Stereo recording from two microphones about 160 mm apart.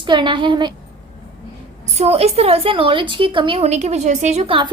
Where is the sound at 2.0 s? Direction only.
40° right (ahead or behind).